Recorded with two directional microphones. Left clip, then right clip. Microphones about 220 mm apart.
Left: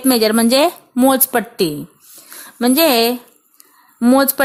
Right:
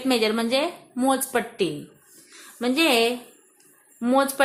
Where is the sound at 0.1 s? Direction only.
40° left (ahead or behind).